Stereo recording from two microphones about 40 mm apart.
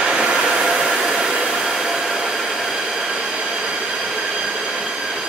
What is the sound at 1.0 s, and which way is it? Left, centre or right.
Hair dryer, centre.